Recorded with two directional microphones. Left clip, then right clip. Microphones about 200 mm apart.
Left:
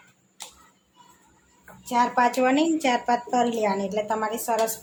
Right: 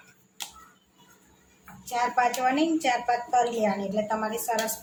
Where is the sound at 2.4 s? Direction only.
50° left (ahead or behind).